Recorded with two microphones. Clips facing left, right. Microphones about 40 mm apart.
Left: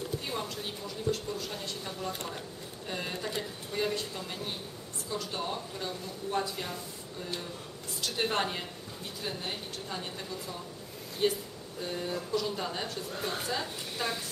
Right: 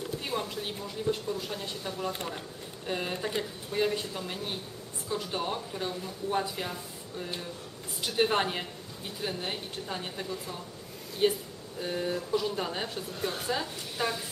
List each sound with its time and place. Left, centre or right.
0.2 s speech: centre